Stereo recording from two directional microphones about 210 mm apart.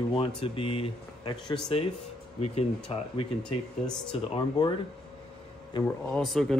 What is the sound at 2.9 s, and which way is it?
Speech, 25° left (ahead or behind).